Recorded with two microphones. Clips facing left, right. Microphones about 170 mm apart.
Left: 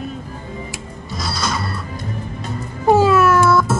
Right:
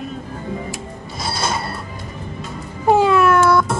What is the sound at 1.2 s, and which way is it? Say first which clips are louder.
Music: right 1 dB; 30° right (ahead or behind).